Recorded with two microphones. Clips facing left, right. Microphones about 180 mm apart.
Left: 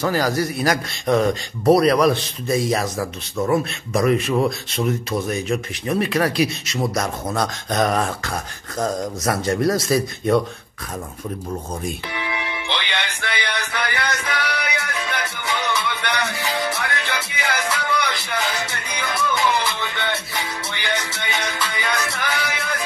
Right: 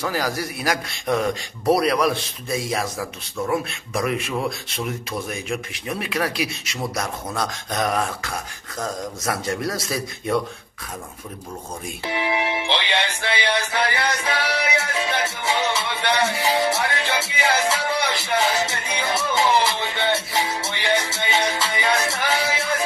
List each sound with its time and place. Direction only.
0.1 s a man's voice: 10° right (ahead or behind)
7.3 s a sound: centre (ahead or behind)
12.1 s music: 25° right (ahead or behind)